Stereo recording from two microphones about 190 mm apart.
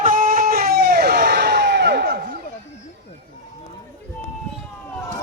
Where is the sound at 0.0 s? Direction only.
45° right (ahead or behind).